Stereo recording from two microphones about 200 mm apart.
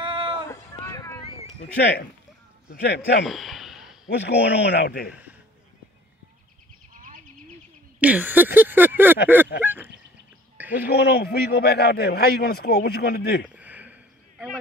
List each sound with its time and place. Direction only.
0.0 s run: 25° right (ahead or behind)
0.5 s run: 15° left (ahead or behind)
1.2 s a sound: 30° left (ahead or behind)
1.8 s speech: 55° left (ahead or behind)
3.3 s a sound: centre (ahead or behind)
4.1 s speech: 60° left (ahead or behind)
6.9 s bird: 40° right (ahead or behind)
8.0 s speech: 5° right (ahead or behind)
10.9 s a man's voice: 55° left (ahead or behind)
13.6 s a sound: 10° right (ahead or behind)